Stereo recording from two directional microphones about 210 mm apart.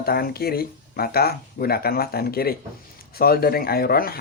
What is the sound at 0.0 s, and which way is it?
Speech, 45° left (ahead or behind).